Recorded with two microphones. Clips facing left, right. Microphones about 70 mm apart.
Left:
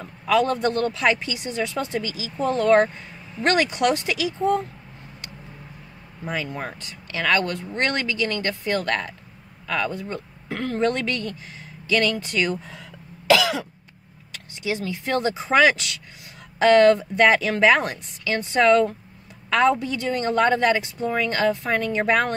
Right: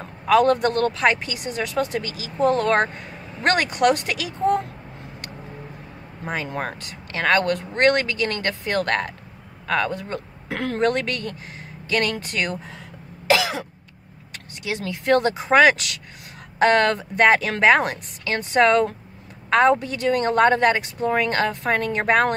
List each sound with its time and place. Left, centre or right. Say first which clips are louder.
0.0 s a man's voice: right 4 dB; right
0.9 s speech: right 1 dB; right
6.2 s speech: right 2 dB; right
9.9 s speech: right 1 dB; right
10.9 s speech: right 1 dB; right
13.3 s throat clearing: left 2 dB; right
14.6 s a woman's voice: left 1 dB; right